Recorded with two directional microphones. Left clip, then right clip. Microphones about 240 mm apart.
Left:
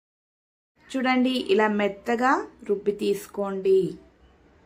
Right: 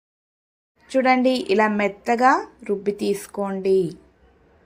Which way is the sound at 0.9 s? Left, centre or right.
Centre.